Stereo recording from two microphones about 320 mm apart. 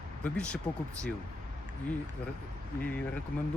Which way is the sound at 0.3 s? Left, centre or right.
Centre.